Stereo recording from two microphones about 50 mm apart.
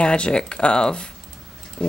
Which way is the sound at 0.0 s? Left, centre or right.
Left.